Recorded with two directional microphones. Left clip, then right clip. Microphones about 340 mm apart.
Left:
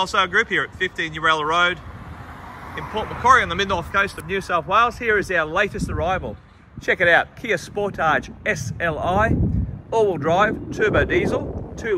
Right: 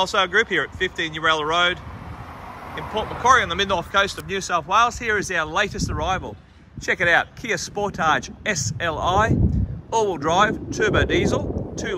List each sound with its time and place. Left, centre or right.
0.0 s speech: centre
2.7 s speech: right
3.2 s speech: centre